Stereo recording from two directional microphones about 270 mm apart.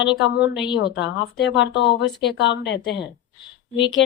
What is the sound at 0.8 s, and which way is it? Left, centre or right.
A woman's voice, left.